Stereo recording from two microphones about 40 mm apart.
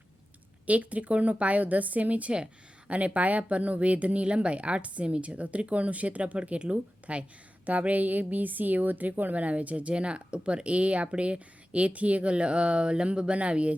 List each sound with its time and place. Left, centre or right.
0.7 s speech: right
2.3 s speech: right